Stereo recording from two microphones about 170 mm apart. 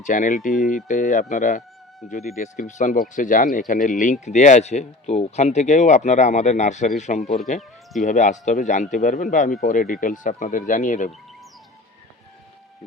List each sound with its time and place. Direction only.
0.0 s speech: 45° left (ahead or behind)